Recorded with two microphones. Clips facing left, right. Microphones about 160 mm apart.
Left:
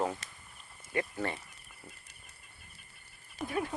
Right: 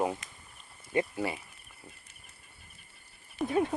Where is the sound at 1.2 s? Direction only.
10° right (ahead or behind).